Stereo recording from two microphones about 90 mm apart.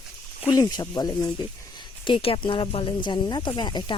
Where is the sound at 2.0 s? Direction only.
80° left; by 4.0 s 55° left (ahead or behind).